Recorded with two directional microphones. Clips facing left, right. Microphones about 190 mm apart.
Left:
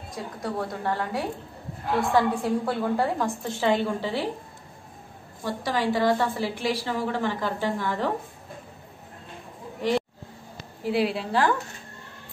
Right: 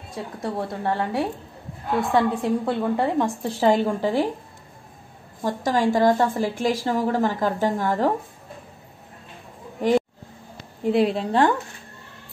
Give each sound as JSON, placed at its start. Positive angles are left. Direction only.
{"t": 0.4, "sound": "a woman's voice", "side_deg": -25}
{"t": 3.4, "sound": "a woman's voice", "side_deg": -40}
{"t": 5.4, "sound": "a woman's voice", "side_deg": -45}
{"t": 9.8, "sound": "vehicle", "side_deg": -45}
{"t": 10.8, "sound": "a woman's voice", "side_deg": 5}